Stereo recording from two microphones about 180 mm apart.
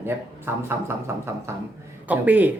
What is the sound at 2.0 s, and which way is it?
Speech, 10° right (ahead or behind).